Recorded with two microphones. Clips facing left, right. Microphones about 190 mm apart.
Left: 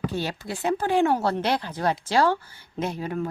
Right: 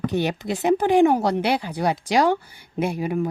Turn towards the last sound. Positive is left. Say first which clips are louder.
# right 5 dB
turn(degrees=-10)  # may be behind; listen again after turning